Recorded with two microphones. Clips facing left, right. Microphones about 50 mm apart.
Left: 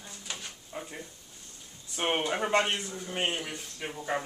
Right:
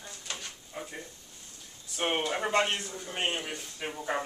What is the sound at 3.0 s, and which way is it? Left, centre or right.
Speech, centre.